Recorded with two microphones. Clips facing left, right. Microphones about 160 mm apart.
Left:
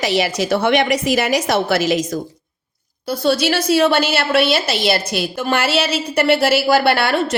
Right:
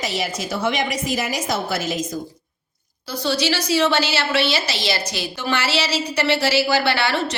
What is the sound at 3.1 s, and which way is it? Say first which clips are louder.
A woman's voice: left 5 dB; 55° left (ahead or behind).